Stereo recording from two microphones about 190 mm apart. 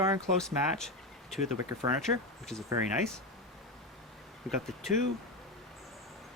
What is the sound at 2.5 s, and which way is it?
Speech, 5° left (ahead or behind).